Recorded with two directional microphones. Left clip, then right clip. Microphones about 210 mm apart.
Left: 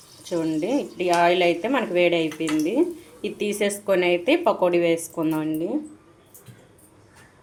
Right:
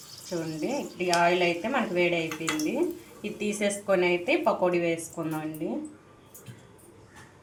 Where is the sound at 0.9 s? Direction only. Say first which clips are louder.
Left 4 dB; 50° left (ahead or behind).